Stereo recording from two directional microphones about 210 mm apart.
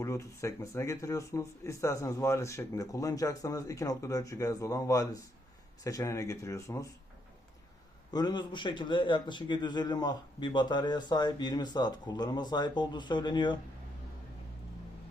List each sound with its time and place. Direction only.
0.0 s speech: 15° left (ahead or behind)
8.1 s a man's voice: 20° left (ahead or behind)